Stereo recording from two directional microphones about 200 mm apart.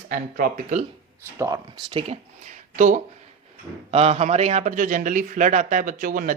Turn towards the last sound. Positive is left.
turn(degrees=-45)  # may be behind; listen again after turning